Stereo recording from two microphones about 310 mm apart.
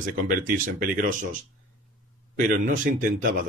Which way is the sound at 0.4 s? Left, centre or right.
Right.